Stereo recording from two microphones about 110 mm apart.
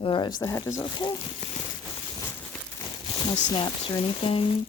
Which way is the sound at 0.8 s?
40° left (ahead or behind).